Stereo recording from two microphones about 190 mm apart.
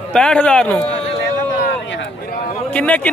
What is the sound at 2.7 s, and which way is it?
Speech, 10° left (ahead or behind).